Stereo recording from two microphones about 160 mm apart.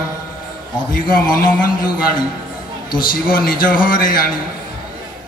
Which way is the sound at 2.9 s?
60° left (ahead or behind).